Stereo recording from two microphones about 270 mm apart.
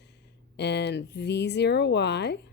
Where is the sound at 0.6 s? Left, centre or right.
Left.